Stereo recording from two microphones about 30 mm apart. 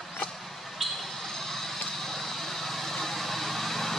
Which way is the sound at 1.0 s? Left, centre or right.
Centre.